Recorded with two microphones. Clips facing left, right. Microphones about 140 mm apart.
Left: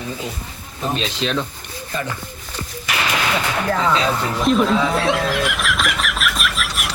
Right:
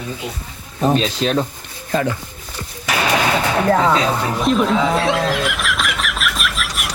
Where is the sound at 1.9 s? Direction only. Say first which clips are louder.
Right 8 dB; 90° right.